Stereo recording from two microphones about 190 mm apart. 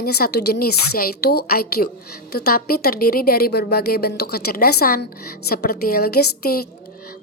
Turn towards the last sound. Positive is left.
turn(degrees=55)  # may be behind; listen again after turning